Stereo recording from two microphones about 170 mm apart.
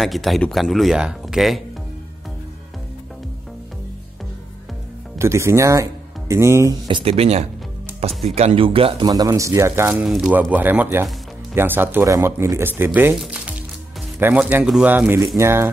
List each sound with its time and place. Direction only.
0.0 s speech: centre (ahead or behind)
5.2 s speech: 15° right (ahead or behind)
6.9 s speech: 30° right (ahead or behind)
9.1 s speech: 20° right (ahead or behind)
13.2 s music: 5° right (ahead or behind)
14.2 s speech: 5° right (ahead or behind)